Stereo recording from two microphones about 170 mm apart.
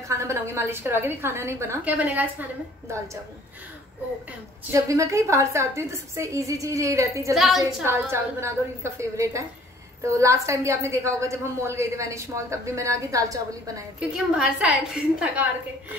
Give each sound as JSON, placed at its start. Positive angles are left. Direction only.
{"t": 0.1, "sound": "a woman's voice", "side_deg": -15}
{"t": 4.6, "sound": "a woman's voice", "side_deg": -20}
{"t": 7.3, "sound": "a woman's voice", "side_deg": 0}
{"t": 7.8, "sound": "a woman's voice", "side_deg": -15}
{"t": 13.9, "sound": "a woman's voice", "side_deg": -5}